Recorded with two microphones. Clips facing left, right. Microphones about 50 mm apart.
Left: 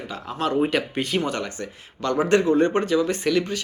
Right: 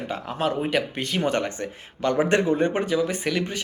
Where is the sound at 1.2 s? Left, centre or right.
Right.